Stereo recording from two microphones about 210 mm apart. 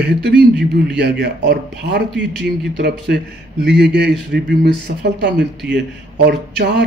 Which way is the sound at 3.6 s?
55° right (ahead or behind).